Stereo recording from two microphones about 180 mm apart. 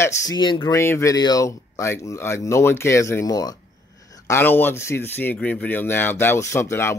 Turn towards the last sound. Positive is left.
turn(degrees=15)  # may be behind; listen again after turning